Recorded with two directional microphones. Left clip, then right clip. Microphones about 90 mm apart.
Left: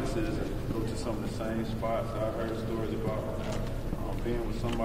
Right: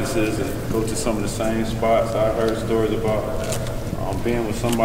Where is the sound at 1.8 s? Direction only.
40° right (ahead or behind).